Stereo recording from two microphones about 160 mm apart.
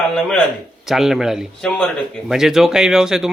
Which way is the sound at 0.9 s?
Centre (ahead or behind).